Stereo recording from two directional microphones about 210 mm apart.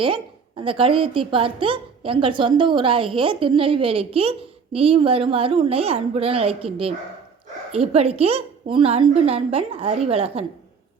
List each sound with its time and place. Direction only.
0.0 s a woman's voice: 25° right (ahead or behind)